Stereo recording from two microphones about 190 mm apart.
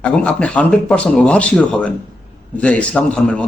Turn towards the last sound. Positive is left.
turn(degrees=5)  # may be behind; listen again after turning